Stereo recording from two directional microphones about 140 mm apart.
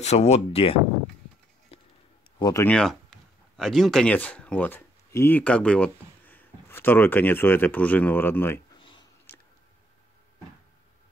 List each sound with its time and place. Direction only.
0.0 s speech: 50° left (ahead or behind)
1.7 s music: 45° left (ahead or behind)
2.3 s speech: 25° left (ahead or behind)
2.6 s speech: 5° left (ahead or behind)
8.7 s a sound: 35° left (ahead or behind)